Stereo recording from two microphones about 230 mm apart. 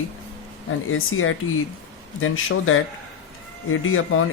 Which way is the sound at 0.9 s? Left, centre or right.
Left.